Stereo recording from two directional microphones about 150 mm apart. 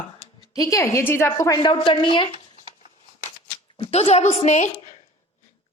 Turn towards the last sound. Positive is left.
turn(degrees=50)  # may be behind; listen again after turning